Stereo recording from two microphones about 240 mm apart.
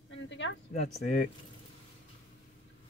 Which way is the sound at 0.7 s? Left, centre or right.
Left.